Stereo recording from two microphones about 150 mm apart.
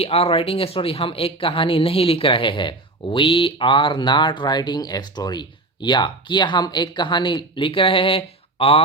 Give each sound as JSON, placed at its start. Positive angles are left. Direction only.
{"t": 0.0, "sound": "speech", "side_deg": 40}